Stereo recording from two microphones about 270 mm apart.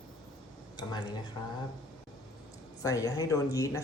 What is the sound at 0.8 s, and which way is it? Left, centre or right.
Speech, centre.